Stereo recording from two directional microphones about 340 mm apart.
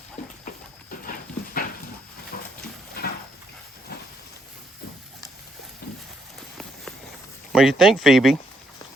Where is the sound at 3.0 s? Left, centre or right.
Left.